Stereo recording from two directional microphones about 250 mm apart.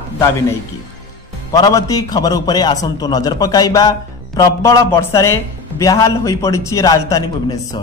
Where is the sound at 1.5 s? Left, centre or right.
Centre.